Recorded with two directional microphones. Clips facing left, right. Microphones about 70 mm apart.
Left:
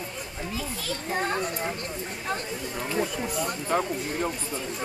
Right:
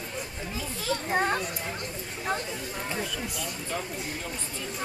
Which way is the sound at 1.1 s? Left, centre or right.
Centre.